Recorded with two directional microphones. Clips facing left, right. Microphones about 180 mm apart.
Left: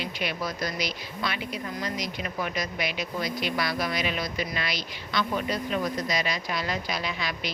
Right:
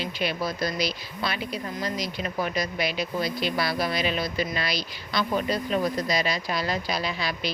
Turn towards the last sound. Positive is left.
turn(degrees=-35)  # may be behind; listen again after turning